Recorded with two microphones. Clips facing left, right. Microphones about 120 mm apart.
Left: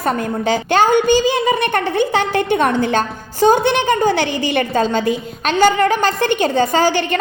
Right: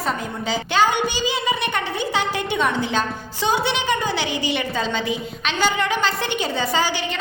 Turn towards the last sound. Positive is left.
turn(degrees=50)  # may be behind; listen again after turning